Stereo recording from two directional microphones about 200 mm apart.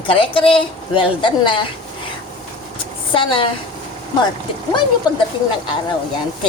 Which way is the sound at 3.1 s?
25° left (ahead or behind).